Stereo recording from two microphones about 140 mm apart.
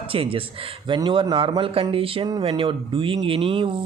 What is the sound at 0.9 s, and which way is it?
Speech, 30° right (ahead or behind).